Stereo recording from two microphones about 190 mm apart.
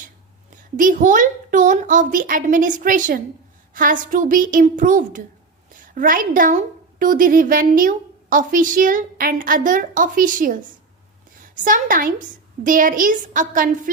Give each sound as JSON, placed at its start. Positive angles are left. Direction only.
{"t": 0.8, "sound": "a woman's voice", "side_deg": -45}